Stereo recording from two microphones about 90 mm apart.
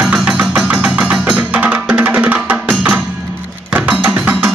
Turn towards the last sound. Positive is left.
turn(degrees=-25)  # may be behind; listen again after turning